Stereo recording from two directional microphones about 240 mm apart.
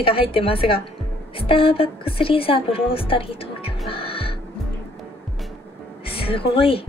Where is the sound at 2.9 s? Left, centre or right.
Left.